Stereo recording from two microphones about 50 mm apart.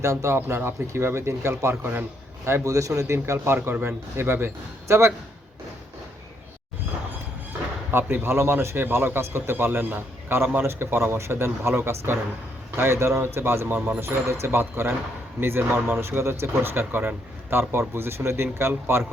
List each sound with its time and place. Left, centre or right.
0.0 s speech: right
0.3 s a man's voice: right
2.4 s speech: right
3.3 s a man's voice: right
7.9 s a man's voice: right